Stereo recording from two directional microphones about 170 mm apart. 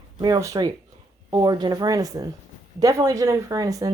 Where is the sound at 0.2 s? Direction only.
20° right (ahead or behind).